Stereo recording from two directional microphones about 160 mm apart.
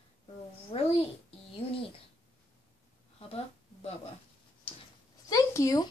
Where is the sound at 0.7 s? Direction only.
35° left (ahead or behind).